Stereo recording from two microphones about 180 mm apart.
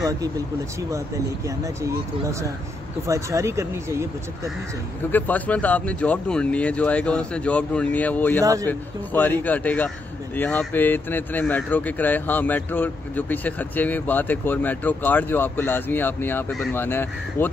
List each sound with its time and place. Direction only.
1.6 s speech: 15° right (ahead or behind)
5.1 s speech: 10° left (ahead or behind)